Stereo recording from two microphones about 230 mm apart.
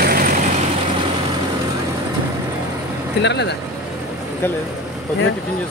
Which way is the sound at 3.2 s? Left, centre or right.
Left.